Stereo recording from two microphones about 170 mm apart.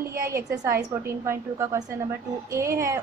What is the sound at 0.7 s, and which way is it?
A woman's voice, 20° right (ahead or behind).